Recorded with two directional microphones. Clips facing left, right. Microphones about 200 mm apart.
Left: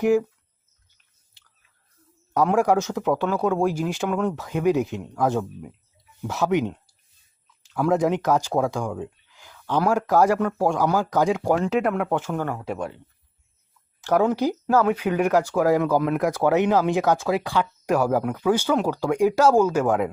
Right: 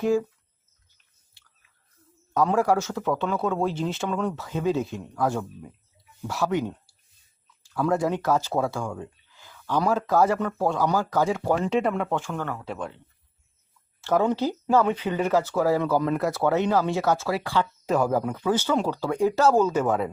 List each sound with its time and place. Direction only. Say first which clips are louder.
0.0 s speech: left 3 dB; 15° left (ahead or behind)
2.3 s speech: left 2 dB; 15° left (ahead or behind)
11.6 s speech: left 2 dB; 5° left (ahead or behind)
14.0 s speech: left 2 dB; 15° left (ahead or behind)